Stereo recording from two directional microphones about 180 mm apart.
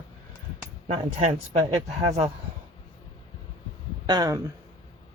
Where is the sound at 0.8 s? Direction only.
40° right (ahead or behind).